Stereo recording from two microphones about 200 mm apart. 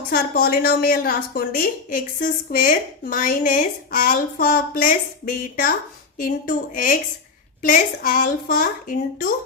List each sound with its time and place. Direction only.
0.1 s a woman's voice: 50° left (ahead or behind)